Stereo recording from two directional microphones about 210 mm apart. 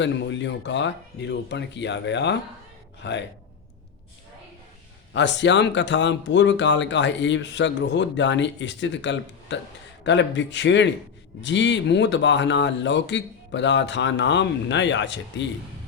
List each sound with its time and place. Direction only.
0.0 s speech: 60° left (ahead or behind)
5.1 s speech: 55° left (ahead or behind)